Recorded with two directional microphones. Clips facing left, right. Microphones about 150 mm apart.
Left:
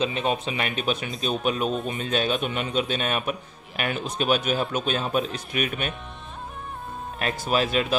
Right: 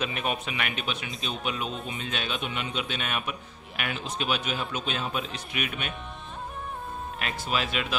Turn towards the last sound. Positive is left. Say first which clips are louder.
# left 6 dB
turn(degrees=40)  # may be behind; listen again after turning